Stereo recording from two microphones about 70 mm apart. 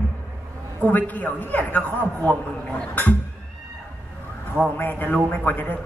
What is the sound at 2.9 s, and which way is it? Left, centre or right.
Speech, left.